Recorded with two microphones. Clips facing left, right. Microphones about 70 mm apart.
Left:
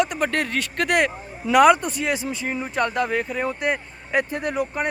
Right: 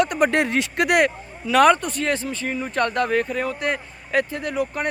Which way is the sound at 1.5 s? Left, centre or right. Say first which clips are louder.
Left 1 dB; centre.